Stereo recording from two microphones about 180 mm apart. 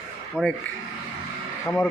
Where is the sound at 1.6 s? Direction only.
10° left (ahead or behind).